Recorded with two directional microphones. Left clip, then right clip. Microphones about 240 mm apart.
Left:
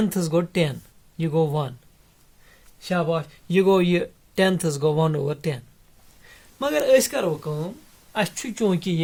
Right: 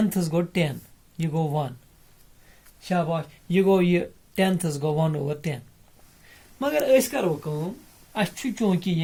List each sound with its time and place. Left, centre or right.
0.0 s speech: left
2.8 s speech: left